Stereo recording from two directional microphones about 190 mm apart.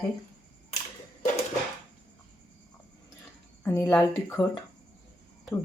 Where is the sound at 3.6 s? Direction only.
10° left (ahead or behind).